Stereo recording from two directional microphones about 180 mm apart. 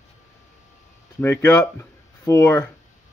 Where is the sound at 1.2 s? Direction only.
15° left (ahead or behind).